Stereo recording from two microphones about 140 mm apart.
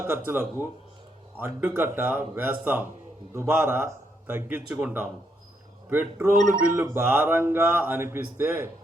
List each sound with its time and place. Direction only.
0.0 s speech: 15° right (ahead or behind)